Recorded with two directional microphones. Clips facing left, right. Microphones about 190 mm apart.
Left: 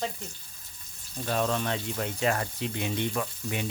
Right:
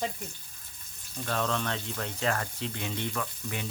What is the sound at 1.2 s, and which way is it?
Speech, 15° left (ahead or behind).